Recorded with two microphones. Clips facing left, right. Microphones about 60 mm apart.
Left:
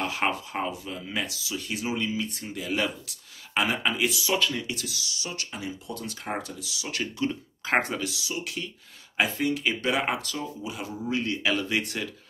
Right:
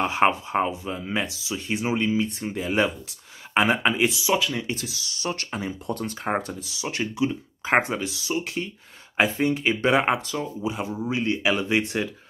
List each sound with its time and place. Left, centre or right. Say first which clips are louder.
0.0 s speech: right 7 dB; right
4.3 s speech: right 3 dB; centre
4.6 s speech: right 3 dB; right
8.1 s speech: right 5 dB; right